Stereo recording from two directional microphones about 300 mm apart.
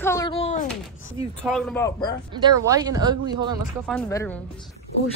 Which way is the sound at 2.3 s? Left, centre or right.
Centre.